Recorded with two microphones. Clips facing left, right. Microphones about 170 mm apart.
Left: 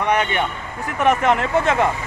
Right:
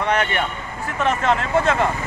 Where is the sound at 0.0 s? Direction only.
15° left (ahead or behind).